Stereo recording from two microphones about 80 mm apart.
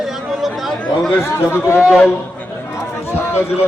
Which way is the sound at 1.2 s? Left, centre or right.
Left.